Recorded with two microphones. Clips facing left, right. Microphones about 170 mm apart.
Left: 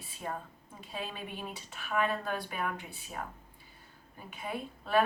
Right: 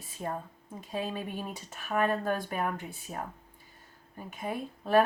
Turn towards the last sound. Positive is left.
turn(degrees=-45)  # may be behind; listen again after turning